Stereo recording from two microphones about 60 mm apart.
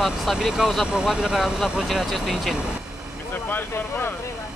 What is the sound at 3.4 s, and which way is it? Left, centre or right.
Speech, left.